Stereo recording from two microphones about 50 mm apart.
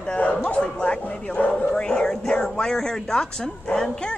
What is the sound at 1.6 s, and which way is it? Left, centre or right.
Speech, centre.